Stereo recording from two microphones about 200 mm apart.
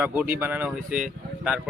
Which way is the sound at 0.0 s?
10° right (ahead or behind).